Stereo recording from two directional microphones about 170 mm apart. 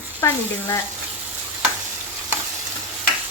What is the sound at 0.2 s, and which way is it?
Speech, 15° left (ahead or behind).